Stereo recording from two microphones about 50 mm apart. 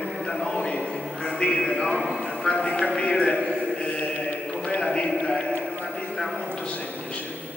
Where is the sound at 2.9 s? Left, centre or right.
Centre.